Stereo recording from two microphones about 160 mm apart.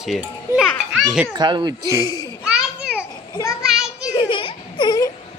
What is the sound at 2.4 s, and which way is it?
Children playing, 5° right (ahead or behind).